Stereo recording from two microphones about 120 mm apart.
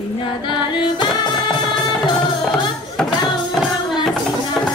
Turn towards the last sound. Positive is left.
turn(degrees=0)  # may be behind; listen again after turning